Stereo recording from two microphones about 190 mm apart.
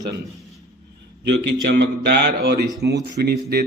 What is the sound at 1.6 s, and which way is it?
Speech, 60° right (ahead or behind).